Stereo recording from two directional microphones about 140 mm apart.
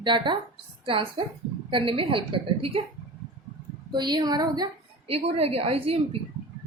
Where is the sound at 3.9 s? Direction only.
30° right (ahead or behind).